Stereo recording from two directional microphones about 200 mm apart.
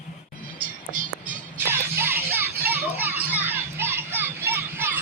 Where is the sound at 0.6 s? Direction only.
40° right (ahead or behind).